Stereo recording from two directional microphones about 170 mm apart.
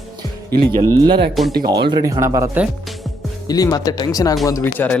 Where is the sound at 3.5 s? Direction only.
20° left (ahead or behind).